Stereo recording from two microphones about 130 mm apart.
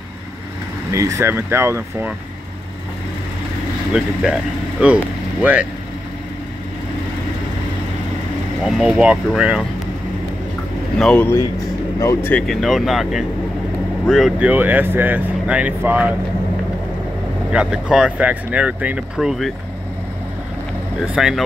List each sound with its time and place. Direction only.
0.9 s speech: 25° right (ahead or behind)
3.9 s speech: 5° right (ahead or behind)
8.6 s speech: 5° right (ahead or behind)
11.0 s speech: 5° left (ahead or behind)
12.0 s speech: 20° left (ahead or behind)
12.4 s speech: centre (ahead or behind)
17.5 s speech: 5° right (ahead or behind)
21.1 s speech: 5° right (ahead or behind)